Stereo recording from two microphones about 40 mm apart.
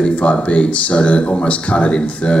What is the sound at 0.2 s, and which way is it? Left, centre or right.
A man's voice, left.